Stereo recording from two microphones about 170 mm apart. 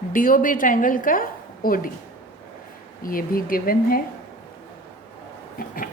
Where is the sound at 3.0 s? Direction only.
55° left (ahead or behind).